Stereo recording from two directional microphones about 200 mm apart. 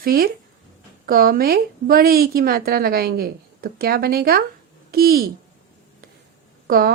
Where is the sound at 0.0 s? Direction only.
50° right (ahead or behind).